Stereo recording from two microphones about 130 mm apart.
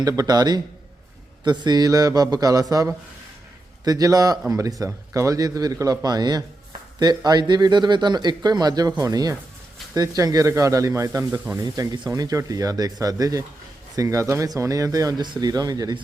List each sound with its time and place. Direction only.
0.0 s speech: 30° right (ahead or behind)